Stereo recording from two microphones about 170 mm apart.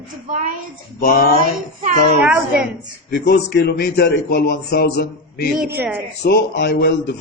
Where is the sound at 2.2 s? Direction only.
5° right (ahead or behind).